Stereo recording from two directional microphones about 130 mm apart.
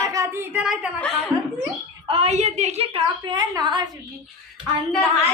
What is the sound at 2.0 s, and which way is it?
A woman's voice, 50° right (ahead or behind).